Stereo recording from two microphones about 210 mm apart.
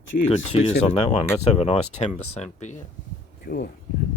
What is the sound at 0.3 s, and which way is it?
Speech, 30° left (ahead or behind).